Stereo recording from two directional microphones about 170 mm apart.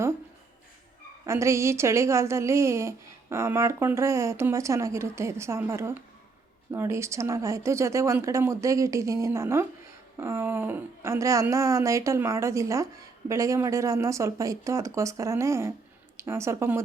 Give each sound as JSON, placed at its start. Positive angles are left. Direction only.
{"t": 1.2, "sound": "speech", "side_deg": -15}